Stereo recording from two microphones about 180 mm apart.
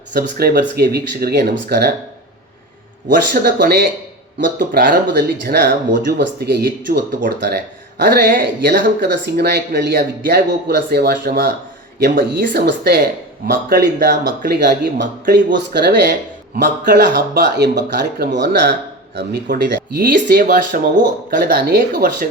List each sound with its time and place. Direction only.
0.1 s speech: 60° right (ahead or behind)
3.4 s speech: 65° right (ahead or behind)
16.6 s speech: 50° right (ahead or behind)
17.0 s speech: 70° right (ahead or behind)
17.8 s speech: 45° right (ahead or behind)
18.3 s speech: 70° right (ahead or behind)
19.5 s speech: 50° right (ahead or behind)